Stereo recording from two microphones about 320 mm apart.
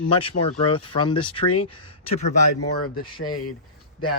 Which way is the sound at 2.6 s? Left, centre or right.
Left.